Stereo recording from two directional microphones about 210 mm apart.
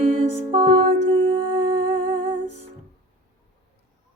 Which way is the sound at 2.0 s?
35° right (ahead or behind).